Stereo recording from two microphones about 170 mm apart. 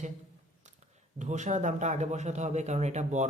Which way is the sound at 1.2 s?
45° right (ahead or behind).